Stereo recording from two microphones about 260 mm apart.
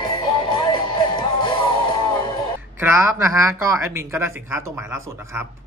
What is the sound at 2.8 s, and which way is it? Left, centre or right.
A man's voice, centre.